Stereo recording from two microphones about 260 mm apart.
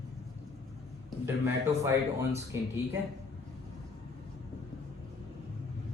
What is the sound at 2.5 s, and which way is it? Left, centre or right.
Speech, centre.